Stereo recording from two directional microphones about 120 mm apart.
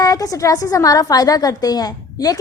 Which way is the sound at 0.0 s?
30° left (ahead or behind).